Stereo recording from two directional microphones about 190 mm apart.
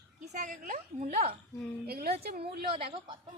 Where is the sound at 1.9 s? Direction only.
55° right (ahead or behind).